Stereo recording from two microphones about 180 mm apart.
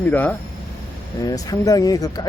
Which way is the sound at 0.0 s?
10° left (ahead or behind).